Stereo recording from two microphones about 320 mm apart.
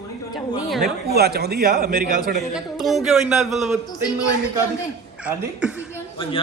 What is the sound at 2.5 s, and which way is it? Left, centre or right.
Speech, centre.